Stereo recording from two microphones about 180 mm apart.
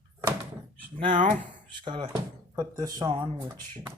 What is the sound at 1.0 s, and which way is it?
Speech, 30° right (ahead or behind).